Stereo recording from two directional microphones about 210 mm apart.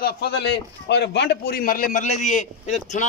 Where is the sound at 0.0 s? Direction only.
50° left (ahead or behind).